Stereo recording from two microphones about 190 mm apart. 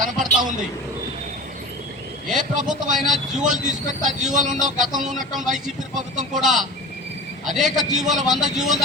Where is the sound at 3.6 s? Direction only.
40° right (ahead or behind).